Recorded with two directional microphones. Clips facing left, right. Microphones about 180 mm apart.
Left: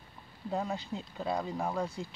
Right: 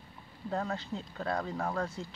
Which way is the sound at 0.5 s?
10° left (ahead or behind).